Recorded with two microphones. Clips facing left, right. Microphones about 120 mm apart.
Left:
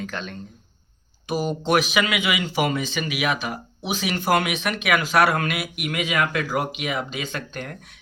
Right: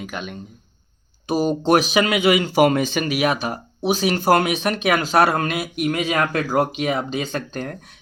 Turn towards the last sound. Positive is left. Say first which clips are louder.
# right 5 dB
turn(degrees=-35)  # may be behind; listen again after turning